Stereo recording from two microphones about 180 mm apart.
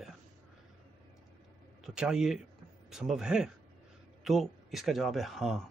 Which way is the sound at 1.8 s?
5° right (ahead or behind).